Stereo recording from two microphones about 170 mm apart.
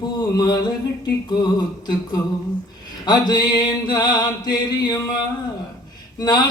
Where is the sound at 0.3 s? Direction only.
25° left (ahead or behind).